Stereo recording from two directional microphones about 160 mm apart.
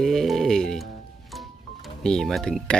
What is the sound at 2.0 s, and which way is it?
Speech, 5° left (ahead or behind).